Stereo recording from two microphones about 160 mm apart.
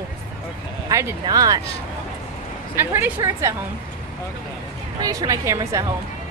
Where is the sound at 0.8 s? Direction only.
20° right (ahead or behind).